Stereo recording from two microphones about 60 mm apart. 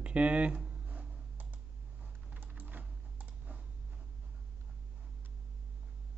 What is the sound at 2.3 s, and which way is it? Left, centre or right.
Typing, right.